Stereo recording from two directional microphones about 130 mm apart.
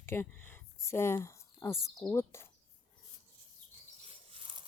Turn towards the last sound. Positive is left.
turn(degrees=-45)  # may be behind; listen again after turning